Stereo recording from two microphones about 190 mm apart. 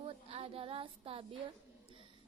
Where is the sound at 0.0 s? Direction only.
30° right (ahead or behind).